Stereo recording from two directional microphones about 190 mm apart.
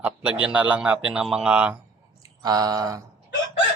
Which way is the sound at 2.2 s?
20° right (ahead or behind).